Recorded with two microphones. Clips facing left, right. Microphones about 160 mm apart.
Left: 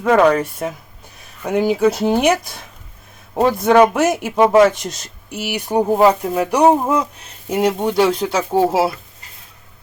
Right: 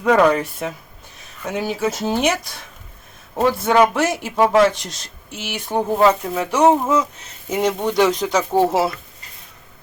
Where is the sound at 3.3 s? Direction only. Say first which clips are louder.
Left 3 dB; 15° left (ahead or behind).